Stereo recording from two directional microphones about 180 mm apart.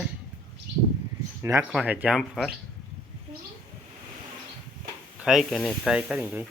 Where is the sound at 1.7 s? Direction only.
10° right (ahead or behind).